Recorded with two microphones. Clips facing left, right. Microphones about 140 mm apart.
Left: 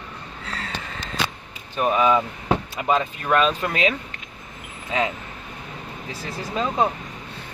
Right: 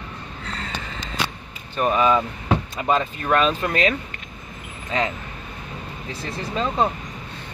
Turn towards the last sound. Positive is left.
turn(degrees=5)  # may be behind; listen again after turning